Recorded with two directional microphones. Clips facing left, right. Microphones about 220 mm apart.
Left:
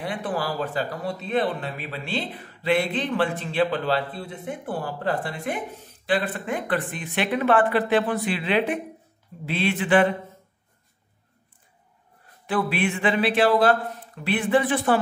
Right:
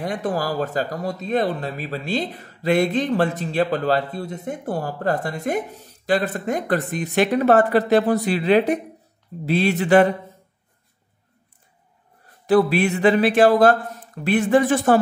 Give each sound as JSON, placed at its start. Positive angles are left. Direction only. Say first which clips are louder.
{"t": 0.0, "sound": "speech", "louder": "right 4 dB", "side_deg": -45}
{"t": 12.4, "sound": "speech", "louder": "right 7 dB", "side_deg": -40}